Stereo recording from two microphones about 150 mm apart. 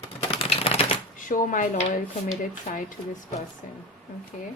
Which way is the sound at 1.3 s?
60° left (ahead or behind).